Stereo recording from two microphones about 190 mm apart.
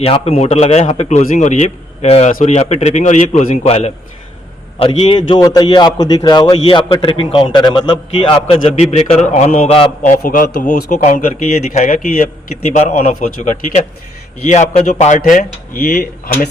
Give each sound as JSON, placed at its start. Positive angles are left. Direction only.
{"t": 0.0, "sound": "a man's voice", "side_deg": 30}
{"t": 10.1, "sound": "a man's voice", "side_deg": 45}